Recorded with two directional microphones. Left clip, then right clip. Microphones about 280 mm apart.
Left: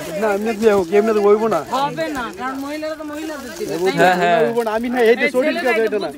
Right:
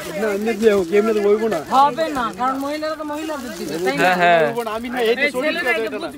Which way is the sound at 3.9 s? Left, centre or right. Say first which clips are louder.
Even; centre.